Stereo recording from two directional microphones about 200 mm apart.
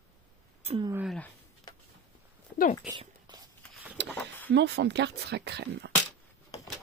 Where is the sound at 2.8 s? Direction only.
20° right (ahead or behind).